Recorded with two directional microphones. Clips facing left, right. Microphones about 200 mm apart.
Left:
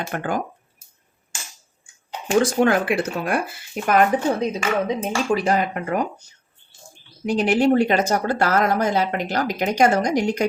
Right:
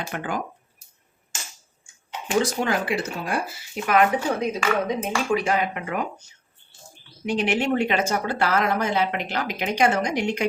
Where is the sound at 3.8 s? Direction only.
40° left (ahead or behind).